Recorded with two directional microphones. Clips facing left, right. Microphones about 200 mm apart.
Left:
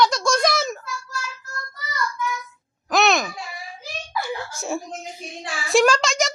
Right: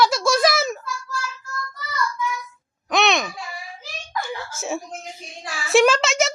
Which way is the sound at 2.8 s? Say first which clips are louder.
Left 1 dB; centre (ahead or behind).